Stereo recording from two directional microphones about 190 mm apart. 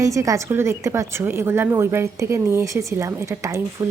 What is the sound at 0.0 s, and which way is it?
Speech, 15° right (ahead or behind).